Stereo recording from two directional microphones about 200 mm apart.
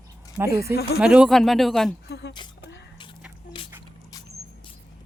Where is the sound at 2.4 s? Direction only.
25° left (ahead or behind).